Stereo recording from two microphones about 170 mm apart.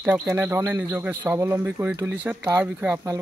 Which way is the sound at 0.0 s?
10° right (ahead or behind).